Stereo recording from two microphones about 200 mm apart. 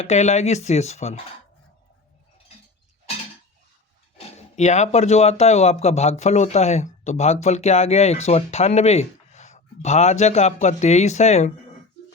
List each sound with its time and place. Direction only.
0.0 s speech: 35° left (ahead or behind)
4.4 s speech: 35° left (ahead or behind)